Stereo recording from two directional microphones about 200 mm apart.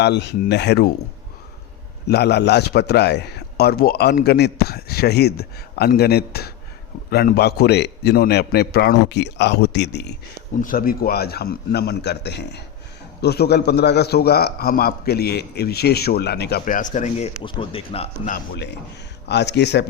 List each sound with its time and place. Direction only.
0.0 s a man's voice: 55° left (ahead or behind)
2.0 s a man's voice: 55° left (ahead or behind)
10.6 s a man's voice: 45° left (ahead or behind); by 18.1 s 30° left (ahead or behind)
18.3 s a man's voice: 50° left (ahead or behind)